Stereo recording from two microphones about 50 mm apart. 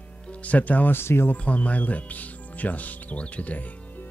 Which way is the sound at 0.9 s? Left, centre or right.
Left.